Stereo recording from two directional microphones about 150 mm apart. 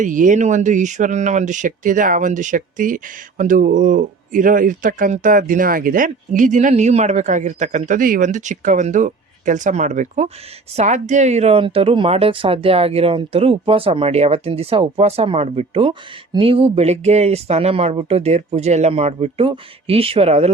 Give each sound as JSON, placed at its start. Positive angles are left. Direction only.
{"t": 0.0, "sound": "speech", "side_deg": -60}